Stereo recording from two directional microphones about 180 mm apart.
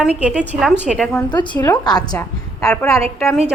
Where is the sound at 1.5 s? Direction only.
10° left (ahead or behind).